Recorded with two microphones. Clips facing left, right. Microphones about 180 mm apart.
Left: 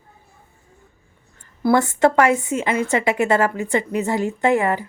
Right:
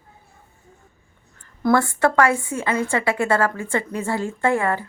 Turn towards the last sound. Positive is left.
turn(degrees=15)  # may be behind; listen again after turning